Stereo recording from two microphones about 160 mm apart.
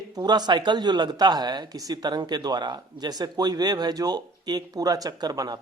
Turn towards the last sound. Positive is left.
turn(degrees=-25)  # may be behind; listen again after turning